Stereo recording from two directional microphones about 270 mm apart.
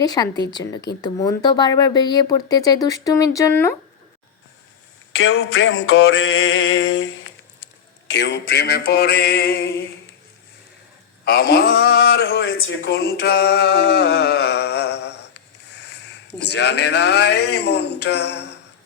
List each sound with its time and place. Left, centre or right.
0.0 s speech: centre
5.1 s a sound: left
11.3 s speech: left